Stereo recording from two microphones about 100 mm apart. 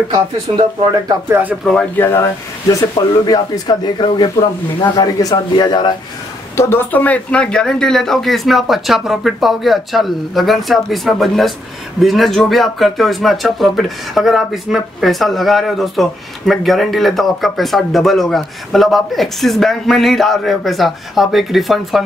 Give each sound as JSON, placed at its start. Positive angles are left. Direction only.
{"t": 0.1, "sound": "speech", "side_deg": -40}
{"t": 1.6, "sound": "speech", "side_deg": 5}
{"t": 2.7, "sound": "a man's voice", "side_deg": 40}
{"t": 6.5, "sound": "speech", "side_deg": 30}
{"t": 6.9, "sound": "speech", "side_deg": 15}